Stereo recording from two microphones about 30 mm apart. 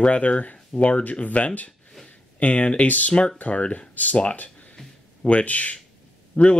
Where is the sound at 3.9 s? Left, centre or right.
Left.